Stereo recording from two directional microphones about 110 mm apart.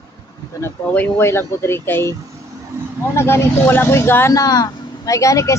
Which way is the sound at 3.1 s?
25° left (ahead or behind).